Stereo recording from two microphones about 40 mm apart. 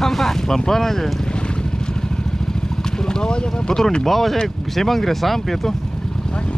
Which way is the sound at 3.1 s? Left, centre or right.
Left.